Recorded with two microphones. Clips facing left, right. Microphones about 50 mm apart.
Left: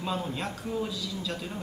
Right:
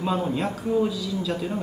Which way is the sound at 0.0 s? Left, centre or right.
Centre.